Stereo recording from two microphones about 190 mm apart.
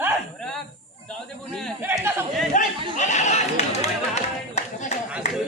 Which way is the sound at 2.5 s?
40° left (ahead or behind).